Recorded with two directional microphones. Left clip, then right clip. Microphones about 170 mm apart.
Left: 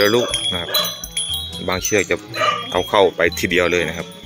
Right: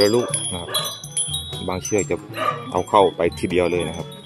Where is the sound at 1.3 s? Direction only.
5° right (ahead or behind).